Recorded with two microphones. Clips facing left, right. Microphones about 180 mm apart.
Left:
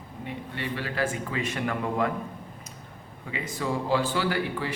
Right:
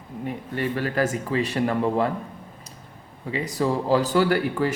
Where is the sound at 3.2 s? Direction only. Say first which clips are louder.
Right 7 dB; 35° right (ahead or behind).